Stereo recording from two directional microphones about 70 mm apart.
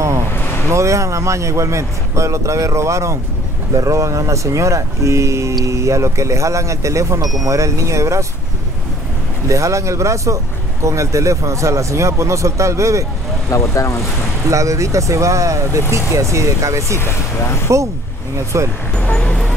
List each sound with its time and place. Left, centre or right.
0.7 s speech: right
9.5 s speech: right
13.5 s speech: left
14.5 s speech: right
17.0 s speech: left
18.5 s speech: right
18.9 s vehicle: centre